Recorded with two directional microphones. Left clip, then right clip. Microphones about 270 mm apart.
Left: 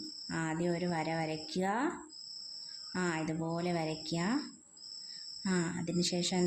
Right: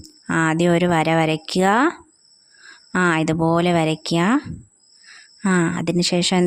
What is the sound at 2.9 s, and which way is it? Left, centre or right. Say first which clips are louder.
A woman's voice: right 17 dB; right.